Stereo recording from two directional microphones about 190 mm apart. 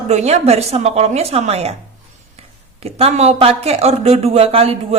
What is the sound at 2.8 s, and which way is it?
Speech, 30° right (ahead or behind).